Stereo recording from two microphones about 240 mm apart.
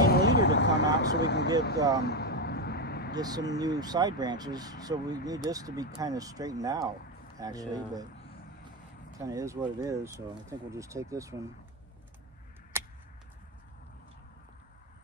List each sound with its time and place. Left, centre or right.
0.0 s vehicle: left
0.9 s speech: left
2.0 s vehicle: left
3.2 s speech: centre
9.2 s speech: centre
12.7 s a sound: centre